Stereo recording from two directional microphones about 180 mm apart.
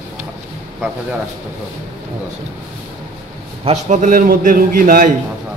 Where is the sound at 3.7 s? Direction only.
45° right (ahead or behind).